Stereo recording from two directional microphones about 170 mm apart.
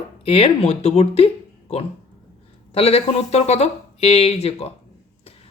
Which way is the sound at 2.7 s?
35° left (ahead or behind).